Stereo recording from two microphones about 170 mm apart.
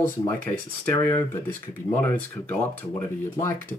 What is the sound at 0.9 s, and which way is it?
Speech, 20° left (ahead or behind).